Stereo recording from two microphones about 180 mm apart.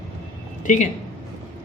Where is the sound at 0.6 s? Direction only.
45° left (ahead or behind).